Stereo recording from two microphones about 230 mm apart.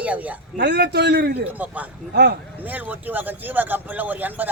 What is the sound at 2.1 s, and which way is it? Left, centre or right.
Speech, right.